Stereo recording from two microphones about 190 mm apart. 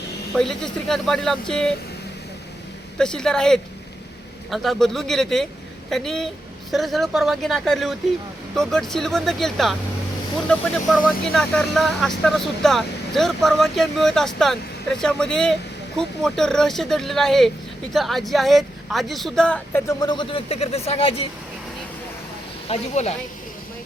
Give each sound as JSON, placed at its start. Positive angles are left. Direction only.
{"t": 0.3, "sound": "speech", "side_deg": 5}
{"t": 3.0, "sound": "speech", "side_deg": 5}
{"t": 22.7, "sound": "speech", "side_deg": 35}